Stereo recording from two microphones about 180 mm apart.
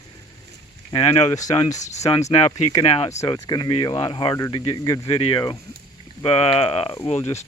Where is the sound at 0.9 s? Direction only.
20° left (ahead or behind).